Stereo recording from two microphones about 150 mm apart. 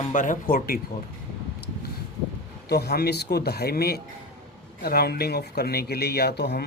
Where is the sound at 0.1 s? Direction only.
60° left (ahead or behind); by 0.8 s 80° left.